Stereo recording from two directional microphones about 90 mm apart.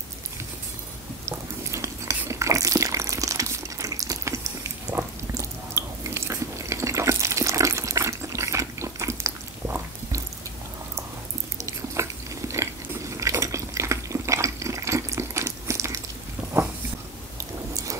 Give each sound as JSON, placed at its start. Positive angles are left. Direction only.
{"t": 1.2, "sound": "biting", "side_deg": -35}
{"t": 11.6, "sound": "biting", "side_deg": -35}
{"t": 13.2, "sound": "water", "side_deg": -35}